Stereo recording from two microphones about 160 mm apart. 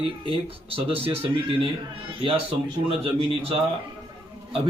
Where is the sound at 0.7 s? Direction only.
35° right (ahead or behind).